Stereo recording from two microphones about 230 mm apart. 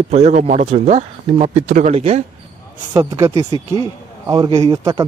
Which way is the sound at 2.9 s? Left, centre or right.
Centre.